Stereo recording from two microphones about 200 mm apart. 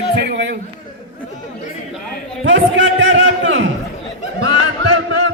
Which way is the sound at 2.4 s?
65° right (ahead or behind).